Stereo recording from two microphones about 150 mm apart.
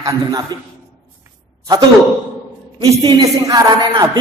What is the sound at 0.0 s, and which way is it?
Speech, 25° right (ahead or behind).